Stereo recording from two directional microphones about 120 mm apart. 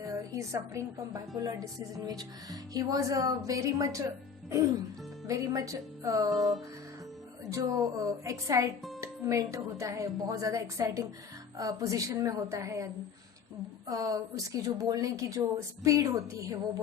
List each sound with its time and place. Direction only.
0.3 s a woman's voice: 25° right (ahead or behind)
5.3 s a woman's voice: 30° right (ahead or behind)
7.5 s a woman's voice: 25° right (ahead or behind)